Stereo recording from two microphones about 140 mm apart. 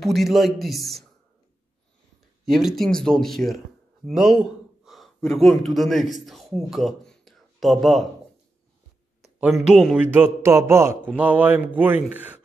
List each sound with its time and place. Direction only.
0.0 s a man's voice: centre (ahead or behind)
2.4 s speech: centre (ahead or behind)
9.4 s a man's voice: 5° right (ahead or behind)
10.1 s speech: 15° right (ahead or behind)